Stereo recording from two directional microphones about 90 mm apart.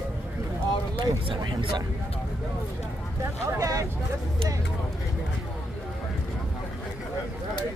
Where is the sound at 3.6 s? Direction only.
35° right (ahead or behind).